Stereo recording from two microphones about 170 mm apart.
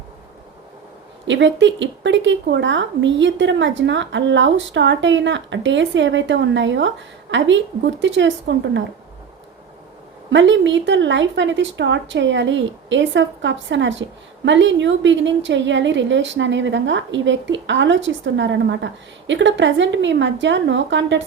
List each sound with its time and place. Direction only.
1.3 s speech: 90° right
10.2 s speech: 90° right